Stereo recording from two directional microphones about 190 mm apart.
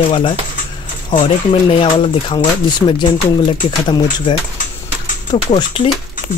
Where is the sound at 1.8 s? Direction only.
25° left (ahead or behind).